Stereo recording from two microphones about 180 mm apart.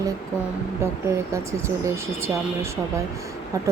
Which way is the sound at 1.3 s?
15° right (ahead or behind).